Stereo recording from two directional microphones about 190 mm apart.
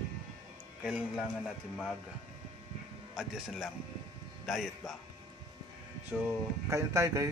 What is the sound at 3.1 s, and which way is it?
A man's voice, 5° right (ahead or behind).